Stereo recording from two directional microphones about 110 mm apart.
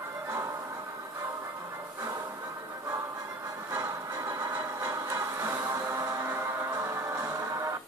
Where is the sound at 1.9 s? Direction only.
30° right (ahead or behind).